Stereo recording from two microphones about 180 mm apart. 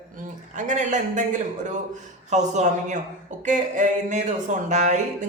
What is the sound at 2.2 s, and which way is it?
A man's voice, 40° right (ahead or behind).